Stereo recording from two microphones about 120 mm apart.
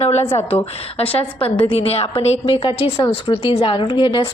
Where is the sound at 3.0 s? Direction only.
45° left (ahead or behind).